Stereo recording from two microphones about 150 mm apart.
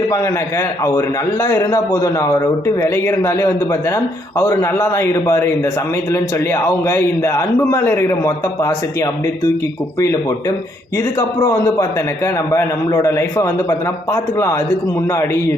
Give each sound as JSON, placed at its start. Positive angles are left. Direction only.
{"t": 0.1, "sound": "a man's voice", "side_deg": 20}
{"t": 11.4, "sound": "a man's voice", "side_deg": 20}